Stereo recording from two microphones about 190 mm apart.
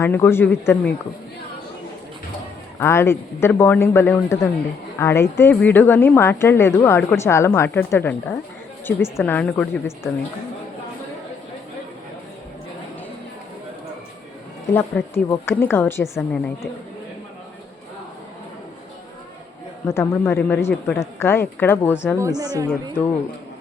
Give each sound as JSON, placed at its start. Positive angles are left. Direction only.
{"t": 0.0, "sound": "speech", "side_deg": 10}
{"t": 2.7, "sound": "speech", "side_deg": 15}
{"t": 14.7, "sound": "speech", "side_deg": 10}
{"t": 19.9, "sound": "speech", "side_deg": 15}
{"t": 22.2, "sound": "speech", "side_deg": -20}